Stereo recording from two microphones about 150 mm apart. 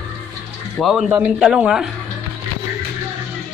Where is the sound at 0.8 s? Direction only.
Centre (ahead or behind).